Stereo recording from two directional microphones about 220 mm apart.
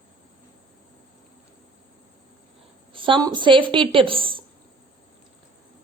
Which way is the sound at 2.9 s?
20° right (ahead or behind).